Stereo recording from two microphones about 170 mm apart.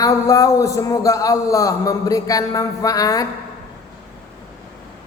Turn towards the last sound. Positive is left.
turn(degrees=20)  # may be behind; listen again after turning